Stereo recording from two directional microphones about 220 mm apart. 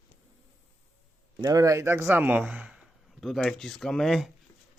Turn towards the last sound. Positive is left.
turn(degrees=0)  # may be behind; listen again after turning